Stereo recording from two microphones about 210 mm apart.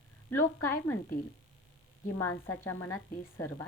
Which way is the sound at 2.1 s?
10° left (ahead or behind).